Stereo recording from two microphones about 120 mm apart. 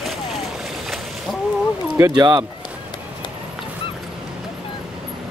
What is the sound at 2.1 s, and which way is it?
Speech, 35° right (ahead or behind).